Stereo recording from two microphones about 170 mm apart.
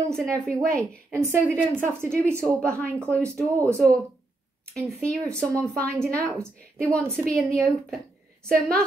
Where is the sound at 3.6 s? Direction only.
5° left (ahead or behind).